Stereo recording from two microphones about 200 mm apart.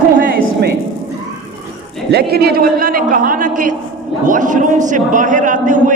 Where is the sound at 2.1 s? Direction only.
55° right (ahead or behind).